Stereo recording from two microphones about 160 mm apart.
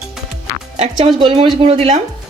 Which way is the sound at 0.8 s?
40° right (ahead or behind).